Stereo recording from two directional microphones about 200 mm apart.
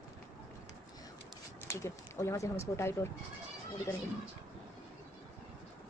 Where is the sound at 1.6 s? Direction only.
15° left (ahead or behind).